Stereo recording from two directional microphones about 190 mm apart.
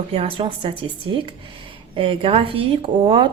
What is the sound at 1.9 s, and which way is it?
A woman's voice, 30° right (ahead or behind).